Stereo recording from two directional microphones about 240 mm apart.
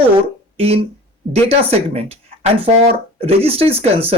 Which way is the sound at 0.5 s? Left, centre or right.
Right.